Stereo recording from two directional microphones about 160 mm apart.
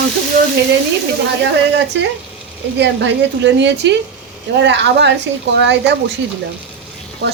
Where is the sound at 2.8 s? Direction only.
90° right.